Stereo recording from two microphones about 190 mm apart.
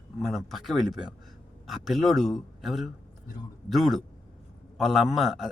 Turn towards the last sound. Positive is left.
turn(degrees=0)  # may be behind; listen again after turning